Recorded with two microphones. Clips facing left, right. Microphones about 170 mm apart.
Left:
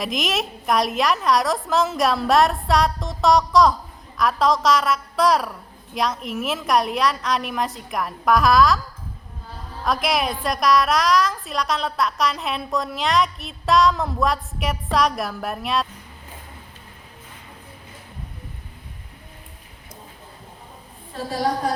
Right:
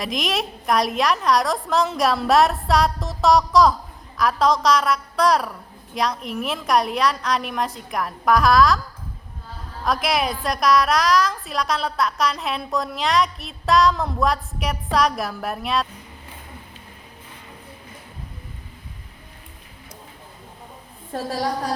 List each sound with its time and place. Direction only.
0.0 s a woman's voice: centre (ahead or behind)
9.8 s a woman's voice: centre (ahead or behind)
21.1 s a woman's voice: 45° right (ahead or behind)